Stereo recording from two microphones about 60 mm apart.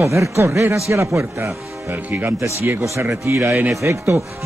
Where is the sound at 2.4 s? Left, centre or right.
Right.